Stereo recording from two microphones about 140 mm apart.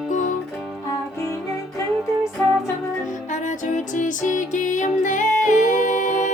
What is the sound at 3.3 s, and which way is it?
Music, 65° left (ahead or behind).